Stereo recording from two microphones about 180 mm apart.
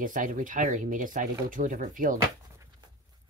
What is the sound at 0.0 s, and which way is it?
Speech, 45° right (ahead or behind).